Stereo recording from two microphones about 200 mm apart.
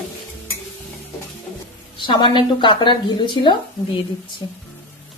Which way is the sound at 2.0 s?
25° left (ahead or behind).